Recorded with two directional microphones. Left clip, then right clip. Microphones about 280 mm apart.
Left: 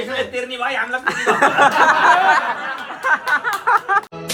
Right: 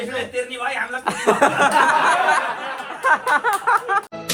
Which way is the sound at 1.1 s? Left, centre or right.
Centre.